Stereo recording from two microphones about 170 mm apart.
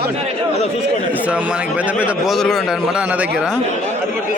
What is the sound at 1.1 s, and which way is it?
A man's voice, 10° right (ahead or behind).